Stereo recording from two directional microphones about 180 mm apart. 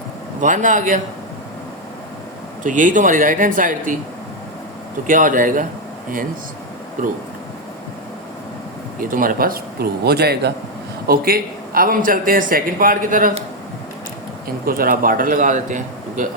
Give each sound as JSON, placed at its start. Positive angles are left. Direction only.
{"t": 0.4, "sound": "a man's voice", "side_deg": -45}
{"t": 2.6, "sound": "a man's voice", "side_deg": -45}
{"t": 5.0, "sound": "a man's voice", "side_deg": -50}
{"t": 7.0, "sound": "a man's voice", "side_deg": -45}
{"t": 9.0, "sound": "a man's voice", "side_deg": -50}
{"t": 14.4, "sound": "a man's voice", "side_deg": -55}